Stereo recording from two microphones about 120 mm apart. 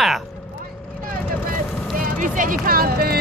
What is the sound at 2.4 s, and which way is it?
Speech, 90° right.